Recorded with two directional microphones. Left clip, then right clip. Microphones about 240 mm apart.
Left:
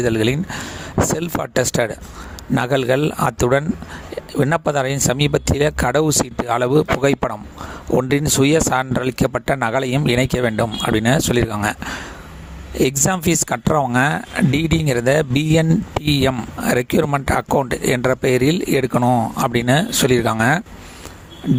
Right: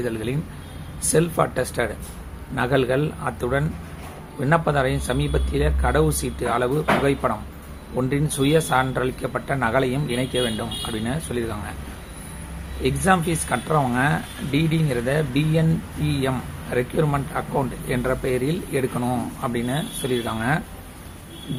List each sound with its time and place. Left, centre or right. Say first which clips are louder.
0.0 s speech: left 9 dB; left
12.8 s speech: left 2 dB; left
16.7 s speech: left 4 dB; left